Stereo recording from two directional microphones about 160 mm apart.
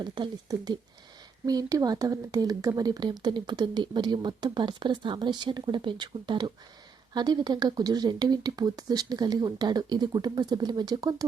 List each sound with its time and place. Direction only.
0.0 s speech: 30° right (ahead or behind)